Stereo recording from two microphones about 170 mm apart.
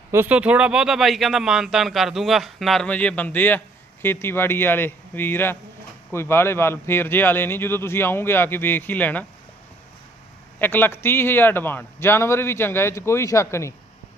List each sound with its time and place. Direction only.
0.1 s a man's voice: 10° right (ahead or behind); by 9.2 s 10° left (ahead or behind)
10.6 s a man's voice: 10° left (ahead or behind)